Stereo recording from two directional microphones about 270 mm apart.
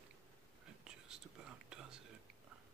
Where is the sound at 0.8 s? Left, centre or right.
Centre.